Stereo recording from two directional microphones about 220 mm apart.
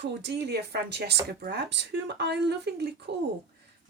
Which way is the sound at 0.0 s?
50° right (ahead or behind).